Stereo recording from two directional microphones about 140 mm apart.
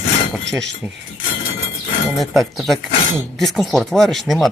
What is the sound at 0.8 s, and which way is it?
Speech, 15° right (ahead or behind).